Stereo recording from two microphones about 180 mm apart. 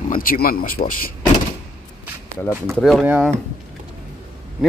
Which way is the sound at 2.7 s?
Centre (ahead or behind).